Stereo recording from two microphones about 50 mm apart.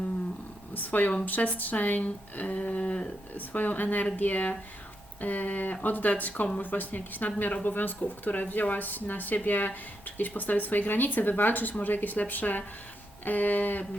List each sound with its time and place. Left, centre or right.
0.7 s speech: left